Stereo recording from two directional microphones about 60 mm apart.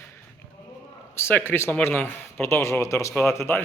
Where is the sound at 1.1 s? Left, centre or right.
Left.